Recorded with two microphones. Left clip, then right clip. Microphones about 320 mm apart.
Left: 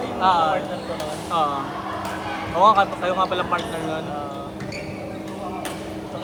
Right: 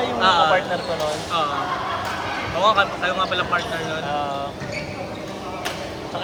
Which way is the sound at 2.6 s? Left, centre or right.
Centre.